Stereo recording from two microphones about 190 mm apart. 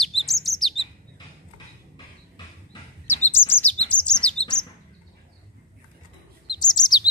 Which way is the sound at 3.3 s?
10° left (ahead or behind).